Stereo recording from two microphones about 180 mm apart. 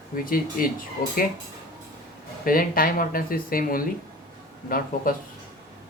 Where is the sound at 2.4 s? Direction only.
50° left (ahead or behind).